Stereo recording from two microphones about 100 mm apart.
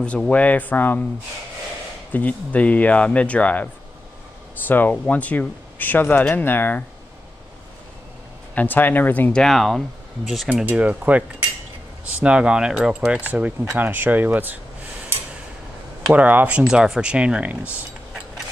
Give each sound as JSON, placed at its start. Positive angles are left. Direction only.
{"t": 0.0, "sound": "speech", "side_deg": 10}
{"t": 2.1, "sound": "speech", "side_deg": 15}
{"t": 4.6, "sound": "speech", "side_deg": 20}
{"t": 8.5, "sound": "speech", "side_deg": 20}
{"t": 9.3, "sound": "speech", "side_deg": 5}
{"t": 10.5, "sound": "speech", "side_deg": -15}
{"t": 16.1, "sound": "speech", "side_deg": -15}